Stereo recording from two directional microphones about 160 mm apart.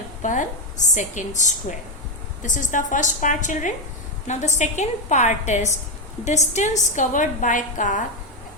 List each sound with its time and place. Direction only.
0.2 s a woman's voice: 50° left (ahead or behind)